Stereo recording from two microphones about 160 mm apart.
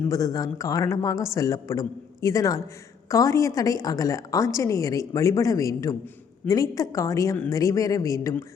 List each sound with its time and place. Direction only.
0.1 s a woman's voice: 20° left (ahead or behind)